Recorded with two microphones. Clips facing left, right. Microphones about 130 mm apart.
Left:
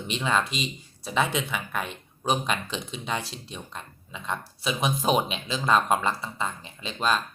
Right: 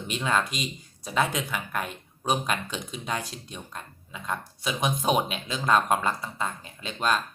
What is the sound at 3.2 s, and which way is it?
Speech, 30° left (ahead or behind).